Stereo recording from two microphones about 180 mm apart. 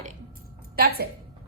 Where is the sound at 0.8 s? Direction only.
60° right (ahead or behind).